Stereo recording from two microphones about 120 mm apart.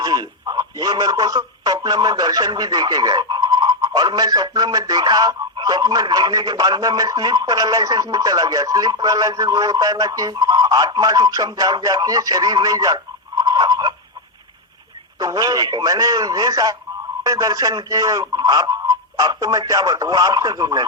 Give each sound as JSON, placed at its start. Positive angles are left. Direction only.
{"t": 0.0, "sound": "speech", "side_deg": -35}
{"t": 15.2, "sound": "a man's voice", "side_deg": -30}